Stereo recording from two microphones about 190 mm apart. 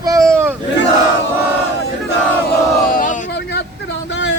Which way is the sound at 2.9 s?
45° left (ahead or behind).